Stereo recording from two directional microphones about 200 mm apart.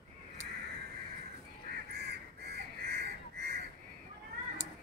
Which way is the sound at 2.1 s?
55° right (ahead or behind).